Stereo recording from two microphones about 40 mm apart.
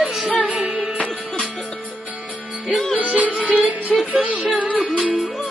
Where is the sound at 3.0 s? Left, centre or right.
Right.